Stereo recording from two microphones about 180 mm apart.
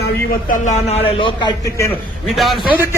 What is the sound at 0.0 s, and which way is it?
A man's voice, 60° left (ahead or behind).